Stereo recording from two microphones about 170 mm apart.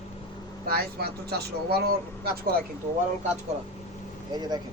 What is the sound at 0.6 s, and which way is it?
Speech, 65° right (ahead or behind).